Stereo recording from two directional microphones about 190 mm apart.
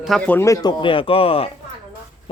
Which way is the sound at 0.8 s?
25° left (ahead or behind).